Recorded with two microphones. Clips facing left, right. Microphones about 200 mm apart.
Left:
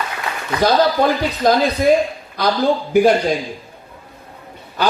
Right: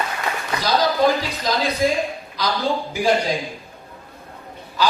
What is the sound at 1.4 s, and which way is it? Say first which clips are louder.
Speech: left 7 dB; 55° left (ahead or behind).